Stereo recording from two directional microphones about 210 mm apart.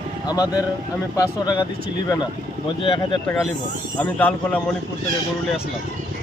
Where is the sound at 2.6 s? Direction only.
25° left (ahead or behind).